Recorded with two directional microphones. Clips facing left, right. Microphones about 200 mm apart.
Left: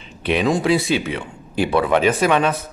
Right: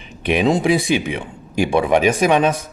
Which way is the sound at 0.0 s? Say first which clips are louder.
Right 2 dB; 15° right (ahead or behind).